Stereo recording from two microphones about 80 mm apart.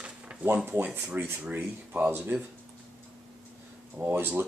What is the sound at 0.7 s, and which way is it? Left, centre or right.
Speech, right.